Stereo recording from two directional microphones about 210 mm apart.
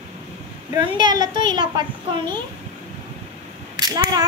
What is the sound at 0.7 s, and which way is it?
A woman's voice, 20° right (ahead or behind).